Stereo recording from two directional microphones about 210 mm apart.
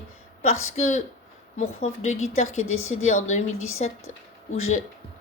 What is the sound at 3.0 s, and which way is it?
Speech, 35° left (ahead or behind).